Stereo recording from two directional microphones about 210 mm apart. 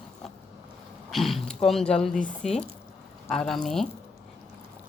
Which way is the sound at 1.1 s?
Centre (ahead or behind).